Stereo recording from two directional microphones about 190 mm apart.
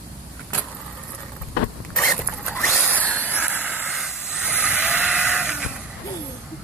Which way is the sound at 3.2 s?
10° right (ahead or behind).